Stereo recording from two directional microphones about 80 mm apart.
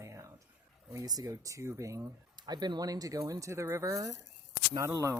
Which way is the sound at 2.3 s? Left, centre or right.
Right.